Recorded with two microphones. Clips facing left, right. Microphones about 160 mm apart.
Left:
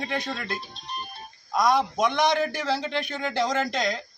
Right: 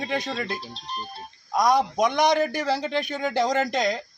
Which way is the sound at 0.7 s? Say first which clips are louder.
Right 2 dB; 35° right (ahead or behind).